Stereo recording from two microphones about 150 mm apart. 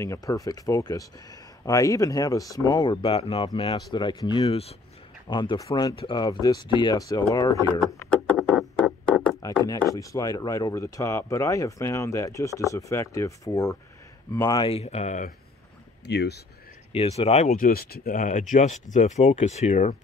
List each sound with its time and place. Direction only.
0.0 s speech: 20° left (ahead or behind)
4.5 s speech: 40° left (ahead or behind); by 7.8 s 25° left (ahead or behind)
8.0 s a sound: 10° left (ahead or behind)
9.4 s speech: 25° left (ahead or behind)
14.7 s speech: 45° left (ahead or behind)
16.1 s speech: 90° left
16.9 s speech: 40° left (ahead or behind)
17.6 s speech: 85° left; by 20.0 s 50° left (ahead or behind)